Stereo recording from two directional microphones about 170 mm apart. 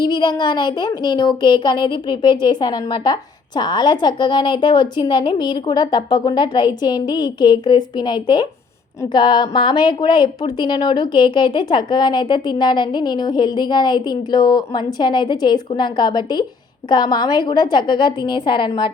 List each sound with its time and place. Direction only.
0.0 s speech: 25° left (ahead or behind)